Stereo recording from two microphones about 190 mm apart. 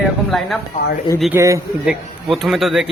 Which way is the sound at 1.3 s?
15° right (ahead or behind).